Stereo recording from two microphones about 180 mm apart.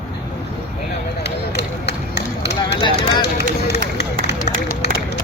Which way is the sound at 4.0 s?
60° left (ahead or behind).